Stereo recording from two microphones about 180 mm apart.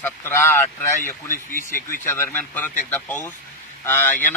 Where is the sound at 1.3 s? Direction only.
50° left (ahead or behind).